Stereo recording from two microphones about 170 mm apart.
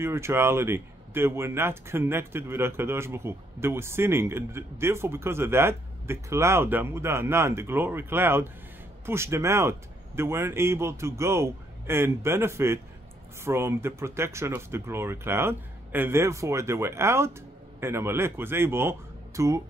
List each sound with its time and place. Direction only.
0.0 s speech: 15° right (ahead or behind)